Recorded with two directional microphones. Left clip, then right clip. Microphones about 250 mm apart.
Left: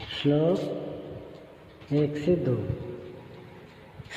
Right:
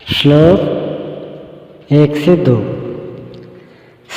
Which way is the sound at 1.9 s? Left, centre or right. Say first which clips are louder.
Right 15 dB; right.